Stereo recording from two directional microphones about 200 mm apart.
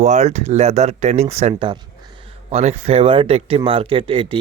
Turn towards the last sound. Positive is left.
turn(degrees=-25)  # may be behind; listen again after turning